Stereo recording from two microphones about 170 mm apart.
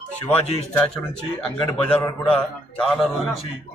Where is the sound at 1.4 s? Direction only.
5° left (ahead or behind).